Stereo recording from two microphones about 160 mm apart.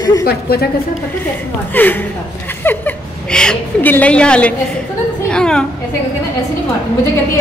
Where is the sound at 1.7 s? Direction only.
10° left (ahead or behind).